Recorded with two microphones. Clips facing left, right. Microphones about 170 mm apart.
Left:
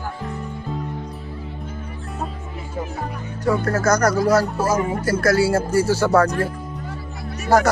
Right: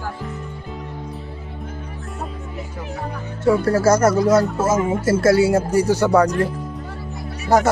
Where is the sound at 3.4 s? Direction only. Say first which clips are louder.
Right 4 dB; 30° right (ahead or behind).